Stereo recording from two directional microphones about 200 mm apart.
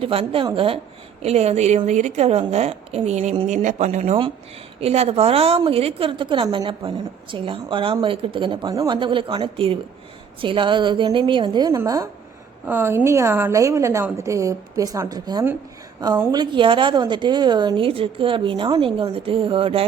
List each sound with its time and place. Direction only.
0.0 s a woman's voice: 30° right (ahead or behind)